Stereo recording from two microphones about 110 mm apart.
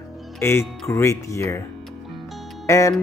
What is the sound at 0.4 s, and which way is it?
Speech, 20° left (ahead or behind).